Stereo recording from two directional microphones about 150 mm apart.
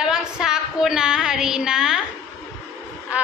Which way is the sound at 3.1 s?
10° right (ahead or behind).